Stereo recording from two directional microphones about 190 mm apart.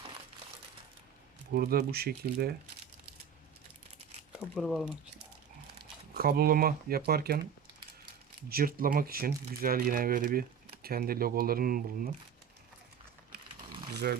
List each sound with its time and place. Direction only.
1.5 s speech: 55° right (ahead or behind)
4.5 s speech: centre (ahead or behind)
6.1 s speech: 50° right (ahead or behind)
8.4 s speech: 50° right (ahead or behind)
13.3 s roaring cats: 60° right (ahead or behind)
14.0 s speech: 50° right (ahead or behind)